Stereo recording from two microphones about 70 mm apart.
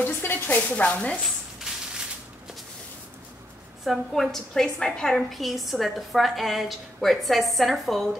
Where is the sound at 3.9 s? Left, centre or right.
Centre.